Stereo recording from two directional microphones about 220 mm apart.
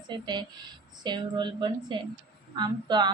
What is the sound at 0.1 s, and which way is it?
A woman's voice, 20° right (ahead or behind).